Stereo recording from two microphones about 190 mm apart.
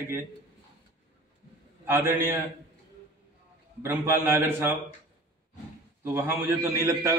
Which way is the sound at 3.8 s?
10° right (ahead or behind).